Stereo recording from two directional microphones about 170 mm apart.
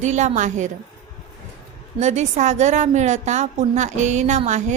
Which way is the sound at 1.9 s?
45° right (ahead or behind).